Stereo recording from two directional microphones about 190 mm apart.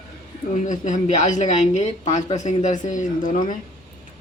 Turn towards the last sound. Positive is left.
turn(degrees=45)  # may be behind; listen again after turning